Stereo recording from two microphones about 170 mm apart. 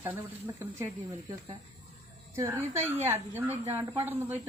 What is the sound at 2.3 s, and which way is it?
Speech, 15° right (ahead or behind).